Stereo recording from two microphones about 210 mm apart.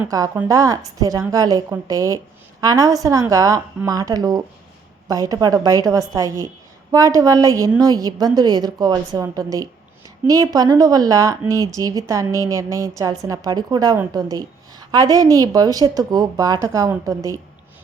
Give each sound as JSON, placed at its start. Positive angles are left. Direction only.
{"t": 0.0, "sound": "a woman's voice", "side_deg": -10}